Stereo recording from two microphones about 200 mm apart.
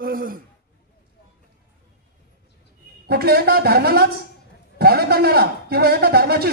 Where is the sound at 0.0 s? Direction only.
45° right (ahead or behind).